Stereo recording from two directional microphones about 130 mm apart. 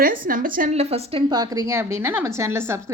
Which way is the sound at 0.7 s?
50° right (ahead or behind).